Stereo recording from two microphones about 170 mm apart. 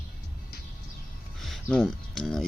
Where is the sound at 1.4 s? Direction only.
Centre (ahead or behind).